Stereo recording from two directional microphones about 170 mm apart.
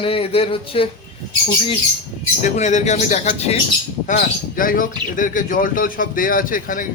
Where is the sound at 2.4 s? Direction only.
45° left (ahead or behind).